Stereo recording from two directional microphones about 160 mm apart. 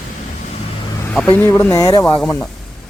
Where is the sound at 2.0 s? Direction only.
10° left (ahead or behind).